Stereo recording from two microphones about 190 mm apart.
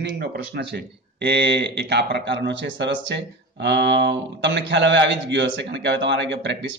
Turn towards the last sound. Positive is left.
turn(degrees=-70)  # may be behind; listen again after turning